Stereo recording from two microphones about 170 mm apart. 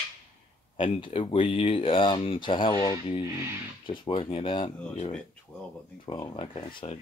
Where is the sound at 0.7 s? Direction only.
30° left (ahead or behind).